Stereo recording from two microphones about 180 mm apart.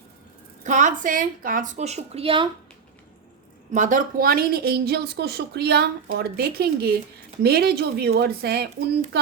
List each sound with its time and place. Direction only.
0.6 s a woman's voice: 45° right (ahead or behind)
3.7 s a woman's voice: 45° right (ahead or behind); by 8.7 s 65° right (ahead or behind)